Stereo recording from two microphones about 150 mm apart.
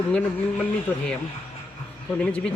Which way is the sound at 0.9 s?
10° left (ahead or behind).